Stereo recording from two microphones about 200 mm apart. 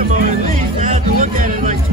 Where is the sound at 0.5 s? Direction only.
40° right (ahead or behind).